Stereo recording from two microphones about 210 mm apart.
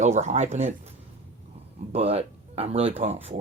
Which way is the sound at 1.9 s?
30° right (ahead or behind).